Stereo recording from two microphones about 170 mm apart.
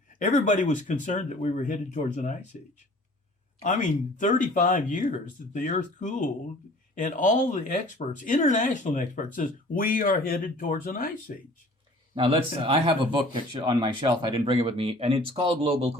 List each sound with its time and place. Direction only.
0.2 s speech: 45° left (ahead or behind)
3.6 s speech: 45° left (ahead or behind)
12.1 s speech: 30° right (ahead or behind)